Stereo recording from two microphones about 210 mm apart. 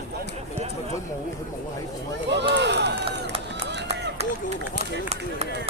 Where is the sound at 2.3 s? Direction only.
55° right (ahead or behind).